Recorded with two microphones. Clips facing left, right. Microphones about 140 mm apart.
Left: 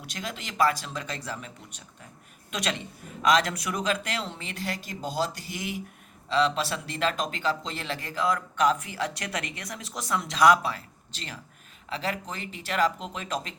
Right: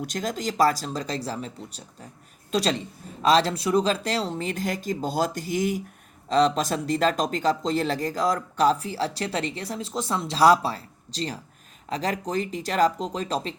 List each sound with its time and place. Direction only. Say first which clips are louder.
0.0 s speech: right 9 dB; 45° right (ahead or behind)